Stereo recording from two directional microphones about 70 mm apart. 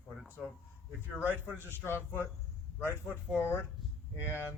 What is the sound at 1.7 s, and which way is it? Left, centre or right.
Speech, left.